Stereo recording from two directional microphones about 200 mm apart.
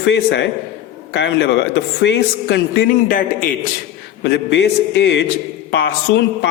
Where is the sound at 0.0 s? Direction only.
60° left (ahead or behind).